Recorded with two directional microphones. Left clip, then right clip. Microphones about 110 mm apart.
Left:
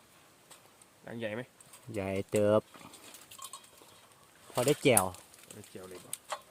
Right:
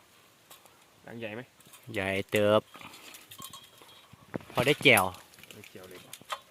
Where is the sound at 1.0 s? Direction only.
90° left.